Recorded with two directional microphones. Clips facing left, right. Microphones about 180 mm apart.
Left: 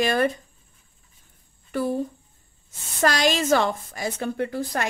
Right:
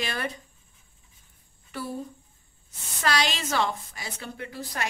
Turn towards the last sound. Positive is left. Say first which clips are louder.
# left 7 dB
turn(degrees=50)  # may be behind; listen again after turning